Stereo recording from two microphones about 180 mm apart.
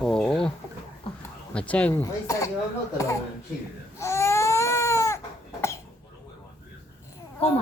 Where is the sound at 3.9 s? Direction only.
15° left (ahead or behind).